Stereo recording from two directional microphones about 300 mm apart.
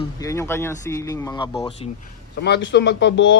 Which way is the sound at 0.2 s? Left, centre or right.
Centre.